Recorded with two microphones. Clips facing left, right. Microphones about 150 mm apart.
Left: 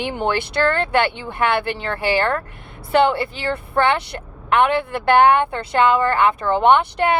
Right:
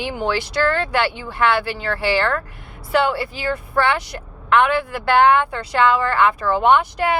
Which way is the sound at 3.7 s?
20° left (ahead or behind).